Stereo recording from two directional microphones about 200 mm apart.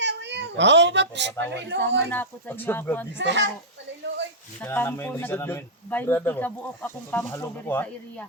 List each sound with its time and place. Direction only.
0.0 s a child's voice: 60° right (ahead or behind)
2.0 s speech: 10° left (ahead or behind)
3.2 s speech: 60° right (ahead or behind)
4.6 s speech: 10° left (ahead or behind)